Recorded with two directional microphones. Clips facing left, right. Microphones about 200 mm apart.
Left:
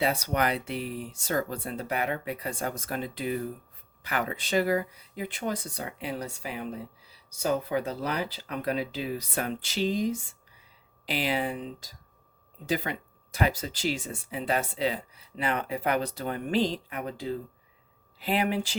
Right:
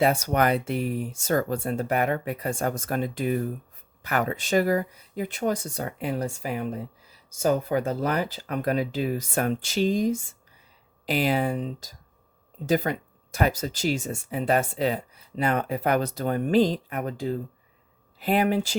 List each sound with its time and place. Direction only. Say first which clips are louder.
0.0 s speech: right 5 dB; 50° right (ahead or behind)